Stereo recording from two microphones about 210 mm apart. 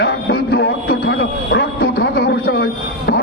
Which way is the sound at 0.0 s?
50° left (ahead or behind).